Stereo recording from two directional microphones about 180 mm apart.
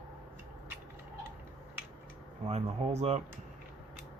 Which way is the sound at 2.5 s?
40° right (ahead or behind).